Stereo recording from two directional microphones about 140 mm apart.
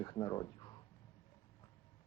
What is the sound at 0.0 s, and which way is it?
Speech, 30° left (ahead or behind).